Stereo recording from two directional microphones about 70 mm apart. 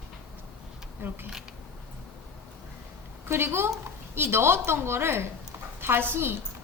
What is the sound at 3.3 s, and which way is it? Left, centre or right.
A woman's voice, right.